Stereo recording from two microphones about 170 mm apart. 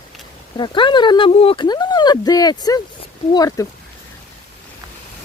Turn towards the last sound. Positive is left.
turn(degrees=20)  # may be behind; listen again after turning